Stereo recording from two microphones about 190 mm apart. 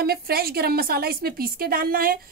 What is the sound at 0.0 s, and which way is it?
A woman's voice, 55° right (ahead or behind).